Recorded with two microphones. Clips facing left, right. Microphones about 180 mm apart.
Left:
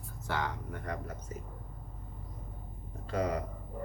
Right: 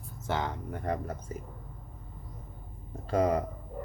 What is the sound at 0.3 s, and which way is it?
Speech, 25° right (ahead or behind).